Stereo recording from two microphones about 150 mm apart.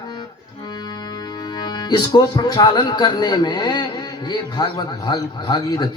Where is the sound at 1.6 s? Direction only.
30° left (ahead or behind).